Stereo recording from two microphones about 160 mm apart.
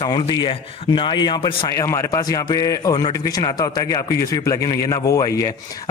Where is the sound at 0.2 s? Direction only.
35° left (ahead or behind).